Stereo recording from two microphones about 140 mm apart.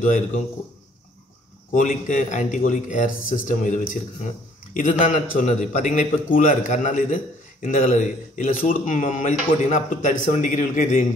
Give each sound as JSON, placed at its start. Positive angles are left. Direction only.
{"t": 0.0, "sound": "a man's voice", "side_deg": 70}
{"t": 1.7, "sound": "a man's voice", "side_deg": 65}